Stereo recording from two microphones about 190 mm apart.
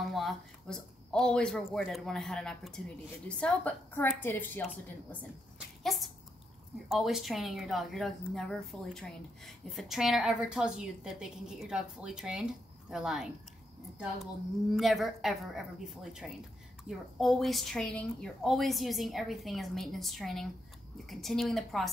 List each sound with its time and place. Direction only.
0.0 s a woman's voice: centre (ahead or behind)
5.9 s a woman's voice: centre (ahead or behind)
14.7 s a woman's voice: centre (ahead or behind)